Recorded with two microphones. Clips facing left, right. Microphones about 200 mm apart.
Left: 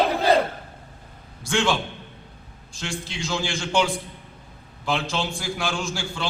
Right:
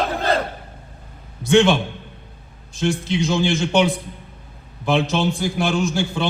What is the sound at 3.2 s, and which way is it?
A man's voice, 20° right (ahead or behind).